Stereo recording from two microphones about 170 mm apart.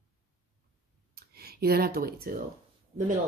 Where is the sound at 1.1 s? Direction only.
65° right (ahead or behind).